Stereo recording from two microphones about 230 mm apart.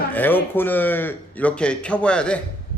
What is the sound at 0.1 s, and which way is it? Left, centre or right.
A man's voice, centre.